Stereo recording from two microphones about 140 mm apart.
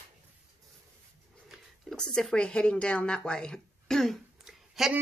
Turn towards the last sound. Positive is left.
turn(degrees=-5)  # may be behind; listen again after turning